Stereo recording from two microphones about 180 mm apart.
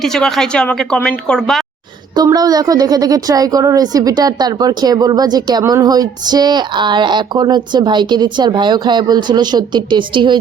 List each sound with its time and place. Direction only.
0.0 s a woman's voice: centre (ahead or behind)
2.1 s a woman's voice: 20° right (ahead or behind)